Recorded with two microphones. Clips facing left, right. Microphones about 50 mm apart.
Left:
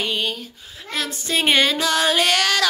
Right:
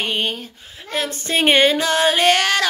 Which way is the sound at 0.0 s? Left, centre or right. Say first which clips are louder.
Right 2 dB; right.